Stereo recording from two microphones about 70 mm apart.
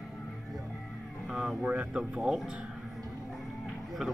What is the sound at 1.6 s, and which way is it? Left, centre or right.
Speech, centre.